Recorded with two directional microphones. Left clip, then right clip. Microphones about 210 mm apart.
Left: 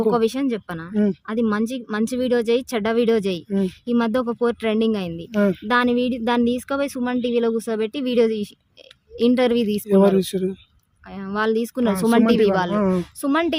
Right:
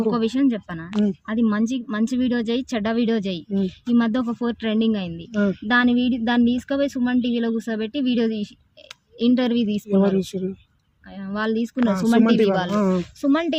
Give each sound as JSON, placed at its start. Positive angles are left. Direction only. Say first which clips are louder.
{"t": 0.1, "sound": "speech", "louder": "left 2 dB", "side_deg": 30}